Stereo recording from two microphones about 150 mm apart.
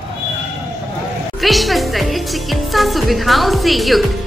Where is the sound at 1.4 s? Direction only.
Centre (ahead or behind).